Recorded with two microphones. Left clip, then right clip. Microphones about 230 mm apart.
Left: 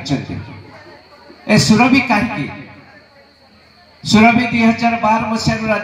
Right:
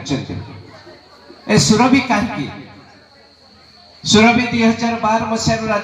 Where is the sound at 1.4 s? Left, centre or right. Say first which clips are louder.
Left 1 dB; left.